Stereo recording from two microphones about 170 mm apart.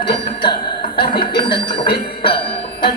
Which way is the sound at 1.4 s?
30° left (ahead or behind).